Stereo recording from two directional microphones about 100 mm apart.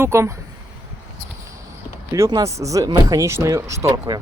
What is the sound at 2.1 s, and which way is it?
Speech, 30° right (ahead or behind).